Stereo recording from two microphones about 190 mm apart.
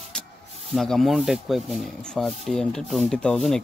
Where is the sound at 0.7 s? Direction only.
Centre (ahead or behind).